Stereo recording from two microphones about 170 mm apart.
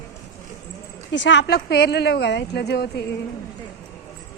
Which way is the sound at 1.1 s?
90° left.